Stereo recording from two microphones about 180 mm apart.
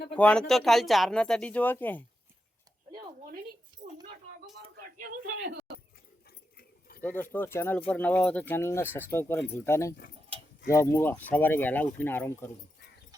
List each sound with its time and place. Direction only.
0.2 s speech: 5° left (ahead or behind)
4.9 s a sound: 50° right (ahead or behind)
6.6 s keys jangling: 55° left (ahead or behind)
7.0 s speech: 10° left (ahead or behind)